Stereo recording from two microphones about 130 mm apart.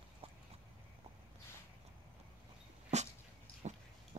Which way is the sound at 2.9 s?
60° right (ahead or behind).